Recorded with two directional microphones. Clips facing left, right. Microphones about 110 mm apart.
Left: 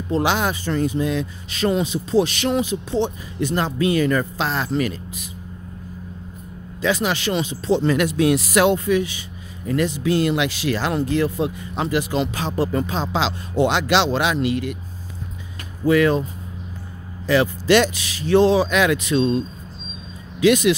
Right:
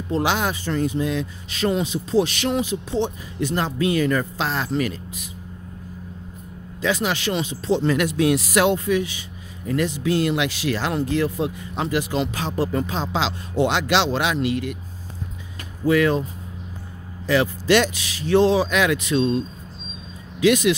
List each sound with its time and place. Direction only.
0.2 s speech: 35° left (ahead or behind)
4.5 s speech: 30° left (ahead or behind)
6.8 s speech: 35° left (ahead or behind)
12.7 s speech: 40° left (ahead or behind)
15.9 s speech: 40° left (ahead or behind)
17.3 s speech: 35° left (ahead or behind)
20.3 s speech: 30° left (ahead or behind)